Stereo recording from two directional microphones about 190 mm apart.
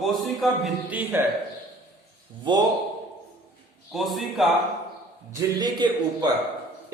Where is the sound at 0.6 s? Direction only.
10° right (ahead or behind).